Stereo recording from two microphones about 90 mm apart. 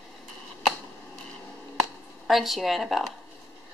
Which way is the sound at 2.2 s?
Centre (ahead or behind).